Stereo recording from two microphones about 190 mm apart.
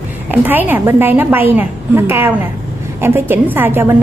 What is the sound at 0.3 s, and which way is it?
A woman's voice, 10° right (ahead or behind).